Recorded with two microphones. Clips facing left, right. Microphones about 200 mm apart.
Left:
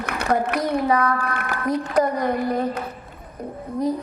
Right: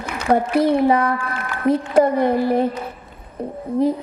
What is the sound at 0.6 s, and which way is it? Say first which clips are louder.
A woman's voice: right 5 dB; 25° right (ahead or behind).